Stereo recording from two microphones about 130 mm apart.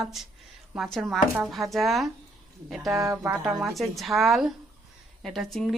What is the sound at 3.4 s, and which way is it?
Speech, 5° right (ahead or behind).